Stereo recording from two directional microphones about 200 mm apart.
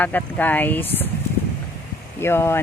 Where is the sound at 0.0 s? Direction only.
10° left (ahead or behind).